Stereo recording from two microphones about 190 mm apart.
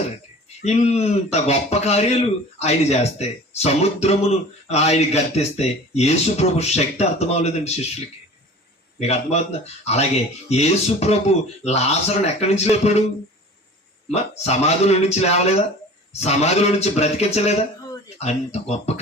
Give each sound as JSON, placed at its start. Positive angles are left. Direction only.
{"t": 0.6, "sound": "speech", "side_deg": 35}
{"t": 9.0, "sound": "speech", "side_deg": 35}
{"t": 14.1, "sound": "speech", "side_deg": 35}